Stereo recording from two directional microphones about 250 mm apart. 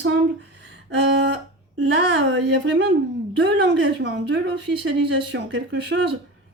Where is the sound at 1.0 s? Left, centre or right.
Right.